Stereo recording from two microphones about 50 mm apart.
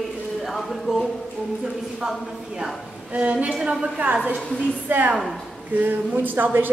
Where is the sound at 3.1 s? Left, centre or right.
Right.